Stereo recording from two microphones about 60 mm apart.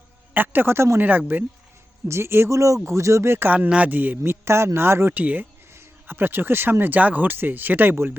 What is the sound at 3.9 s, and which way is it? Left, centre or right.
A man's voice, right.